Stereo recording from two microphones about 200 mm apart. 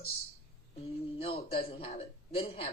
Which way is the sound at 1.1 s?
30° left (ahead or behind).